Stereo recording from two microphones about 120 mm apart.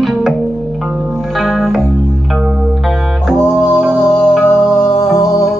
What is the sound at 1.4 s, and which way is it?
Music, centre (ahead or behind).